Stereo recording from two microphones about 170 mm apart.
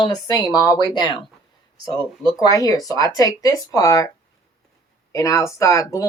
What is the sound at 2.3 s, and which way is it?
Speech, 20° left (ahead or behind).